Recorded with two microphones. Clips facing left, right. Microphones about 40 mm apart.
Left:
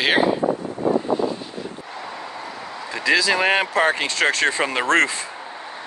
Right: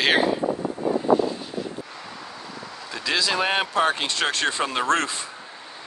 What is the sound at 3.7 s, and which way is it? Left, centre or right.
Speech, left.